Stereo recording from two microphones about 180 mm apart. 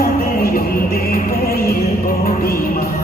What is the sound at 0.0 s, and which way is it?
Music, 55° left (ahead or behind).